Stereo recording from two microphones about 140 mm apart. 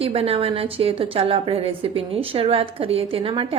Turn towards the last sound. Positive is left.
turn(degrees=-40)  # may be behind; listen again after turning